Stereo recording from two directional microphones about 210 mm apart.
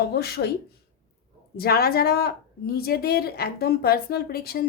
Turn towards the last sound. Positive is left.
turn(degrees=45)  # may be behind; listen again after turning